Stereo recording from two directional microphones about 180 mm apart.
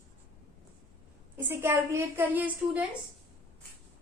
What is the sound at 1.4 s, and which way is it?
A woman's voice, 10° right (ahead or behind).